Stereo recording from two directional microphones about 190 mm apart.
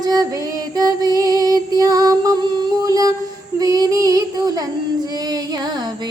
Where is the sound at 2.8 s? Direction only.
20° right (ahead or behind).